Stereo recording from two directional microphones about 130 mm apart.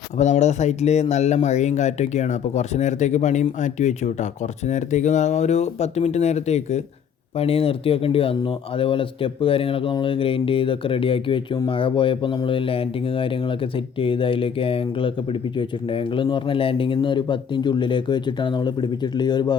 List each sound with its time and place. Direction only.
0.2 s speech: 65° left (ahead or behind)
7.3 s speech: 50° left (ahead or behind)